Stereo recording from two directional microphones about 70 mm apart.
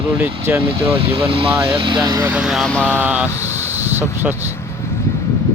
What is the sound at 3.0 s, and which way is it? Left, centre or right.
Speech, right.